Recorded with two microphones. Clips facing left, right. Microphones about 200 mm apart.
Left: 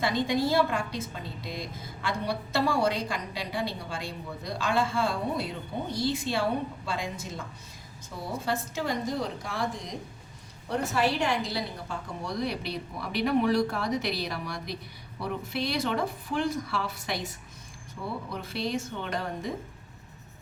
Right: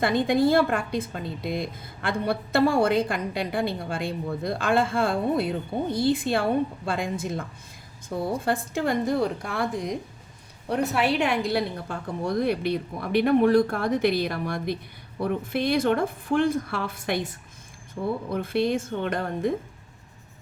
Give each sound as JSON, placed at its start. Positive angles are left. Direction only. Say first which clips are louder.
{"t": 0.0, "sound": "a woman's voice", "louder": "right 6 dB", "side_deg": -55}
{"t": 18.3, "sound": "a woman's voice", "louder": "right 8 dB", "side_deg": -55}